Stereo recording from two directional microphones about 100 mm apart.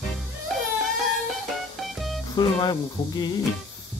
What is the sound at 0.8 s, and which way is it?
Music, centre (ahead or behind).